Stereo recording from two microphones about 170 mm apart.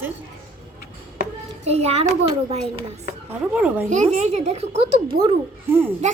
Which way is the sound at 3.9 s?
45° right (ahead or behind).